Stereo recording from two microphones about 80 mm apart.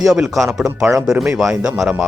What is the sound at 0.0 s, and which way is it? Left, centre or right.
Speech, centre.